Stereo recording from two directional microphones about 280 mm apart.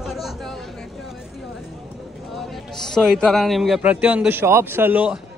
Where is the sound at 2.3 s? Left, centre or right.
Centre.